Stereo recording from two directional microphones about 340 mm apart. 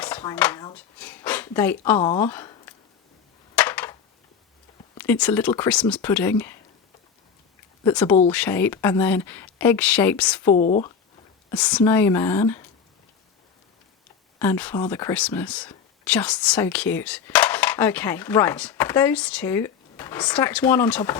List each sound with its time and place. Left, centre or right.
0.0 s a sound: centre
2.0 s speech: centre
3.5 s a sound: centre
4.9 s speech: centre
7.9 s speech: centre
10.5 s speech: centre
11.5 s speech: centre
14.3 s speech: centre